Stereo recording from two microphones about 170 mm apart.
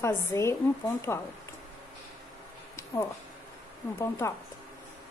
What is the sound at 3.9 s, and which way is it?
Speech, 15° left (ahead or behind).